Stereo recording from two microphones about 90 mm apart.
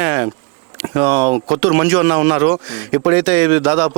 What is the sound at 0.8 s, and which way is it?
Speech, 20° right (ahead or behind).